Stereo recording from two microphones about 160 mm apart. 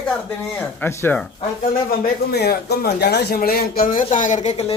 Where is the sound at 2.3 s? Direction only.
90° left.